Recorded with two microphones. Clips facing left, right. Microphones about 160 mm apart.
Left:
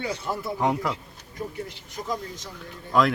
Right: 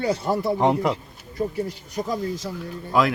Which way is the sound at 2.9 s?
5° right (ahead or behind).